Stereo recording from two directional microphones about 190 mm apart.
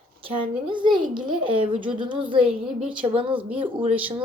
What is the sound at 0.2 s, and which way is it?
Speech, 25° right (ahead or behind).